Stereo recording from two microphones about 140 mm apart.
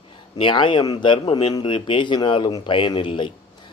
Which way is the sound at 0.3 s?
35° left (ahead or behind).